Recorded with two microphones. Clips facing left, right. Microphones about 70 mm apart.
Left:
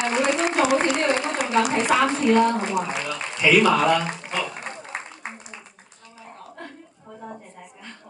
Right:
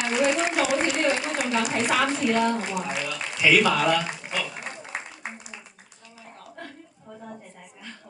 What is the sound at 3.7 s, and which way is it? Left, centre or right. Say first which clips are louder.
Speech: left 3 dB; left.